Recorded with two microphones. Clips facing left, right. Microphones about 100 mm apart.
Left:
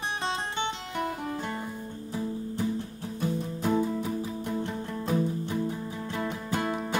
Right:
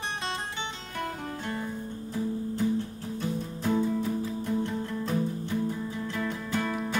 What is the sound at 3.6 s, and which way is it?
Music, 5° left (ahead or behind).